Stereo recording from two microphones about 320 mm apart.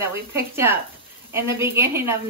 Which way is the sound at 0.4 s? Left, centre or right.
Centre.